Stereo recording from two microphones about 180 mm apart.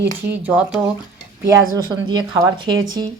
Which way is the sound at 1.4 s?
15° right (ahead or behind).